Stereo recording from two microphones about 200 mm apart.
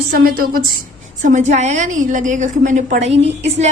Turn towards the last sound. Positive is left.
turn(degrees=-35)  # may be behind; listen again after turning